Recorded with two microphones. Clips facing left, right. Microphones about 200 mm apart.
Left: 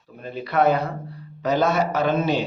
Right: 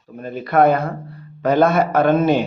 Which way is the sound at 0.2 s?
50° right (ahead or behind).